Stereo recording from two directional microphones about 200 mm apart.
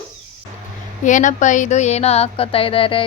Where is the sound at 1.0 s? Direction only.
40° left (ahead or behind).